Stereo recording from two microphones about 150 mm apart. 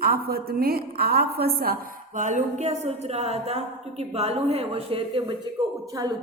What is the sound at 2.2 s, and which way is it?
A woman's voice, 50° right (ahead or behind).